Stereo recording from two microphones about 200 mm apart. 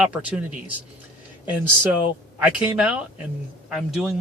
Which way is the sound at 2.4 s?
5° right (ahead or behind).